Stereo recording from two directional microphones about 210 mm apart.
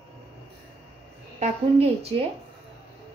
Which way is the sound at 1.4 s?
30° right (ahead or behind).